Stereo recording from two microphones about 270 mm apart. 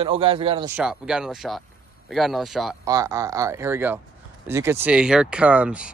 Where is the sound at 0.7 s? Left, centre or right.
Centre.